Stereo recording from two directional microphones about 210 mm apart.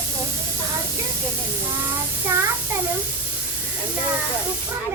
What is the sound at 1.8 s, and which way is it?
Child singing, 10° right (ahead or behind).